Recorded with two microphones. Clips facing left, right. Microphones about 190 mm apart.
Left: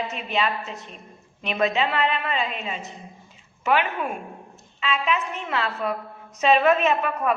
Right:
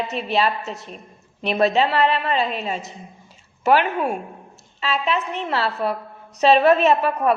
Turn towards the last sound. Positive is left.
turn(degrees=-35)  # may be behind; listen again after turning